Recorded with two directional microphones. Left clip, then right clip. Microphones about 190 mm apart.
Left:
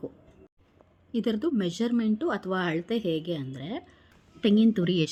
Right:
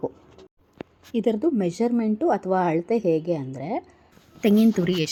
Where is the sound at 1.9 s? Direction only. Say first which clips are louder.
Right 6 dB; 10° left (ahead or behind).